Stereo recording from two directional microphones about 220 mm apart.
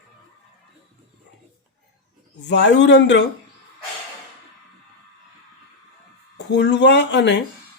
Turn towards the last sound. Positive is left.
turn(degrees=55)  # may be behind; listen again after turning